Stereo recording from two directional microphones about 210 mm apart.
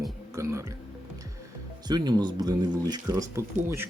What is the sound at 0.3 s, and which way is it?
Speech, 15° right (ahead or behind).